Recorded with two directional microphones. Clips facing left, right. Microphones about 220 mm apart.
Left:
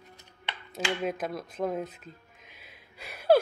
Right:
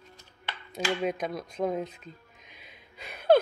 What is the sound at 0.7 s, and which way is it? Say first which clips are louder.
Music: right 2 dB; 5° left (ahead or behind).